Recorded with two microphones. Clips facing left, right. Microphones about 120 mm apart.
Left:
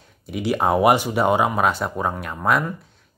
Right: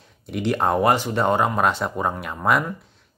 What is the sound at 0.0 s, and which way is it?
Speech, 5° left (ahead or behind).